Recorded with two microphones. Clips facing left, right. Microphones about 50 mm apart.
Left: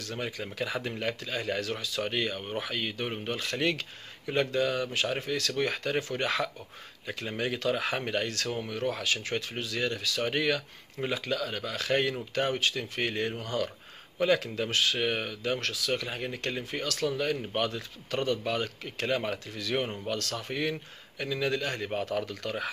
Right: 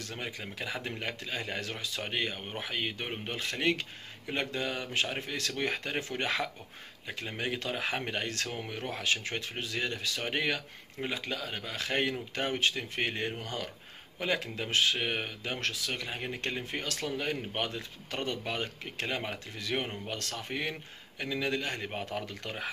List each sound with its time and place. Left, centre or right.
0.1 s speech: centre
20.1 s speech: centre